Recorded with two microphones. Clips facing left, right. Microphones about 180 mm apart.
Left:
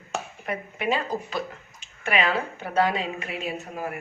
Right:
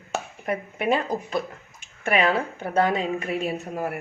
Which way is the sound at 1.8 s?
50° right (ahead or behind).